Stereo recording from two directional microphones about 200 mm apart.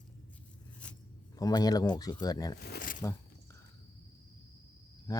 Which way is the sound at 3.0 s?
15° left (ahead or behind).